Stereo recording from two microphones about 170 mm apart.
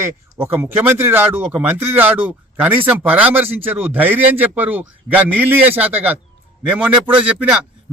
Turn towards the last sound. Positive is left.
turn(degrees=-10)  # may be behind; listen again after turning